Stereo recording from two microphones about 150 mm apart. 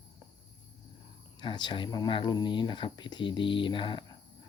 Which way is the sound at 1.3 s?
30° left (ahead or behind).